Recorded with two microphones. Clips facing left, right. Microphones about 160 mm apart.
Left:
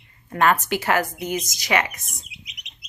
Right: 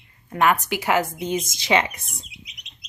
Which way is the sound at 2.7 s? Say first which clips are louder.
Left 1 dB; 15° left (ahead or behind).